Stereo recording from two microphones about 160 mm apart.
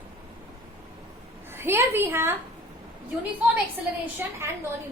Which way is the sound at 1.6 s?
15° right (ahead or behind).